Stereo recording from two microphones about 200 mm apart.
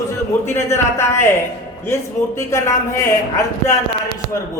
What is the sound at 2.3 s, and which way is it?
Speech, 15° left (ahead or behind).